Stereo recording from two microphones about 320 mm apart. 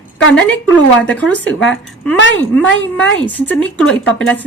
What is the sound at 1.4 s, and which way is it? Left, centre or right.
Speech, left.